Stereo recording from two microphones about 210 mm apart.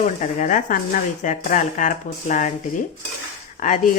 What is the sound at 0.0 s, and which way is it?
Speech, 35° left (ahead or behind).